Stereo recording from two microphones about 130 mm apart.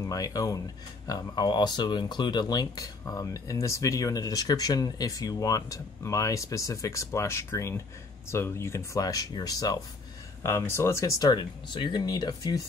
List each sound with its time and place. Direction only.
0.0 s speech: 30° left (ahead or behind)